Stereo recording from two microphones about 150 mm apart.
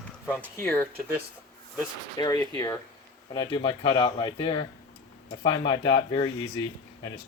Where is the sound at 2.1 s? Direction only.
25° left (ahead or behind).